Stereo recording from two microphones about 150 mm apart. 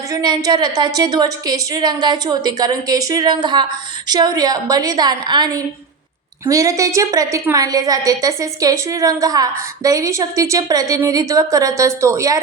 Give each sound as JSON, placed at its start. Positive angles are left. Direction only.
{"t": 0.1, "sound": "a woman's voice", "side_deg": -25}